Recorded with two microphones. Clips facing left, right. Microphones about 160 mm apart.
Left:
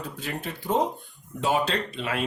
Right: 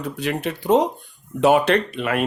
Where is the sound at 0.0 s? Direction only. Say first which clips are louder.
Right 9 dB; 75° right (ahead or behind).